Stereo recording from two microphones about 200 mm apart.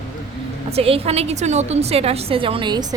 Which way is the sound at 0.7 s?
30° right (ahead or behind).